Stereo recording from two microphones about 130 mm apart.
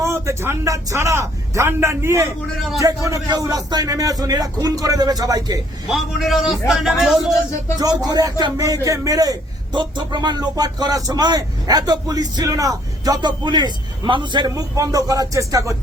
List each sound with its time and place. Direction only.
0.0 s a man's voice: 20° right (ahead or behind)
5.9 s a man's voice: centre (ahead or behind)
7.8 s a man's voice: 30° right (ahead or behind)